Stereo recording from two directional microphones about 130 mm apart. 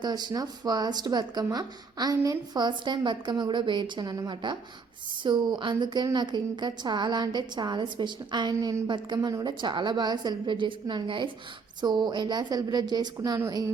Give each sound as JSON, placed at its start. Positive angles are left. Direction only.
{"t": 0.0, "sound": "speech", "side_deg": -30}
{"t": 8.5, "sound": "speech", "side_deg": -25}
{"t": 8.9, "sound": "speech", "side_deg": -35}